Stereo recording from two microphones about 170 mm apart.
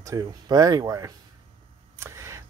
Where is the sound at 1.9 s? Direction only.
15° right (ahead or behind).